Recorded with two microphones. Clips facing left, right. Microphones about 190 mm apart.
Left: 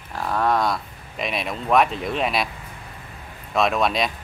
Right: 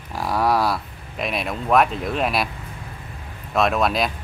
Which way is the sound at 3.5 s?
Centre (ahead or behind).